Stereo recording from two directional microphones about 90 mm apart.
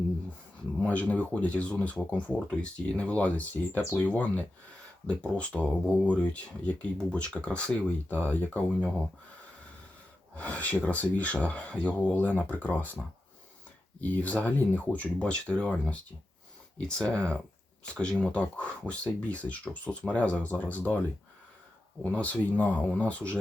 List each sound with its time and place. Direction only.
0.8 s speech: 15° left (ahead or behind)
10.3 s speech: 15° left (ahead or behind)
14.0 s speech: 15° left (ahead or behind)
22.0 s speech: 15° left (ahead or behind)